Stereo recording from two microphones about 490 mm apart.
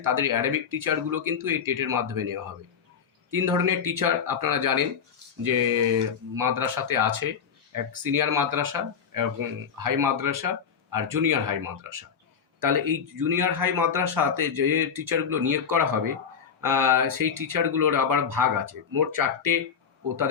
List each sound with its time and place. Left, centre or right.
0.0 s speech: right